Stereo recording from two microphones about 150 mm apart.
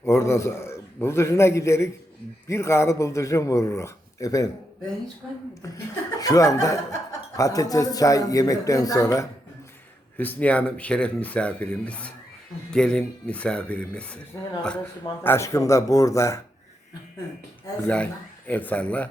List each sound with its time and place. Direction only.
0.0 s speech: 15° left (ahead or behind)
5.6 s speech: 20° left (ahead or behind)
10.2 s speech: 10° left (ahead or behind)
15.2 s speech: 15° left (ahead or behind)
17.8 s speech: 10° left (ahead or behind)